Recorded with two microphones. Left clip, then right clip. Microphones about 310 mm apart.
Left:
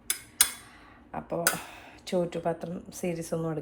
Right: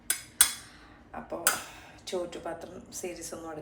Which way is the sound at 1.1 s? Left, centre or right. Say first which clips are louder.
Left 2 dB; left.